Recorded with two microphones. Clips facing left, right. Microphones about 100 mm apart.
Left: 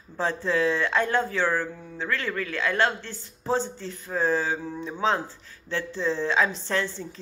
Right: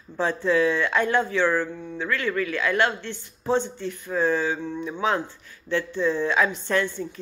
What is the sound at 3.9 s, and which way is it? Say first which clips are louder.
A woman's voice: right 2 dB; 35° left (ahead or behind).